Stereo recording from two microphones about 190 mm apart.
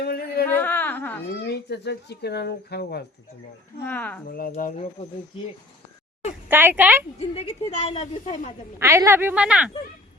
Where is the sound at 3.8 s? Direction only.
10° left (ahead or behind).